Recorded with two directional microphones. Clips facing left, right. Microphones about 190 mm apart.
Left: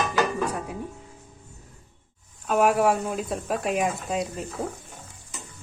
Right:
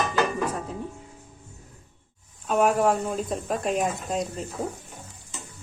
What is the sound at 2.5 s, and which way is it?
Speech, 10° left (ahead or behind).